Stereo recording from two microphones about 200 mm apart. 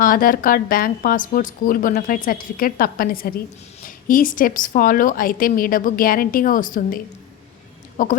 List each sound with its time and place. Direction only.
0.0 s a woman's voice: 45° left (ahead or behind)